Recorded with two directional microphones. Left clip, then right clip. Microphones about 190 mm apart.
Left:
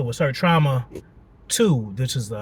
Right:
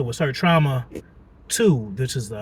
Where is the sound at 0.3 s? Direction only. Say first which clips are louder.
Right 1 dB; 20° left (ahead or behind).